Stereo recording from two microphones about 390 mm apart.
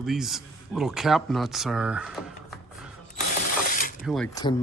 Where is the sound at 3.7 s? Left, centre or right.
Left.